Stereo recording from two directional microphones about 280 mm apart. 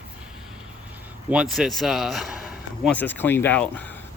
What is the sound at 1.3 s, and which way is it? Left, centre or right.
A man's voice, centre.